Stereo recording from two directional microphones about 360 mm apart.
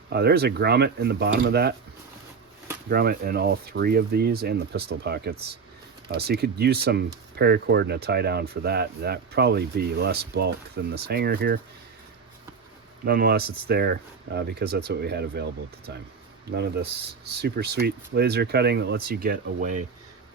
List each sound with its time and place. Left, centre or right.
0.1 s speech: right
2.9 s speech: right
13.1 s speech: right
16.5 s speech: right